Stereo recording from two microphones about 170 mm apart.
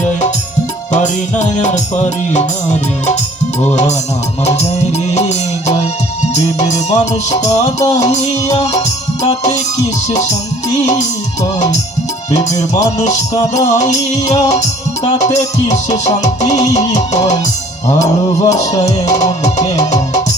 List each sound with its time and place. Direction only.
0.9 s music: 45° left (ahead or behind)
5.1 s music: 40° left (ahead or behind)
13.7 s music: 45° left (ahead or behind)
17.8 s mantra: 20° left (ahead or behind)
19.2 s music: 40° left (ahead or behind)